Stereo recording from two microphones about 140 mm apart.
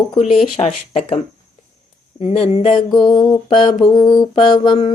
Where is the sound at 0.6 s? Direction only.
45° left (ahead or behind).